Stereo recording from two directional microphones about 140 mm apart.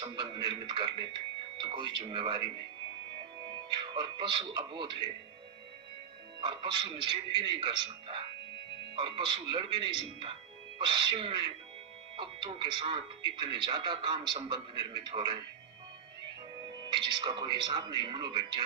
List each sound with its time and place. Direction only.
0.0 s speech: 35° right (ahead or behind)
6.4 s speech: 35° right (ahead or behind)
16.6 s speech: 35° right (ahead or behind)